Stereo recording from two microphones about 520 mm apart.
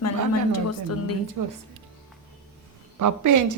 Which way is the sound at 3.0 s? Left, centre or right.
Right.